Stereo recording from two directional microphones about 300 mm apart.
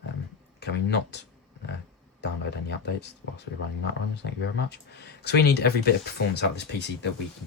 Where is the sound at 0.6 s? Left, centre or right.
Left.